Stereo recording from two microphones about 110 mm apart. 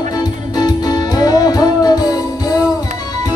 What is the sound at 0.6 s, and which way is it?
Music, 35° left (ahead or behind).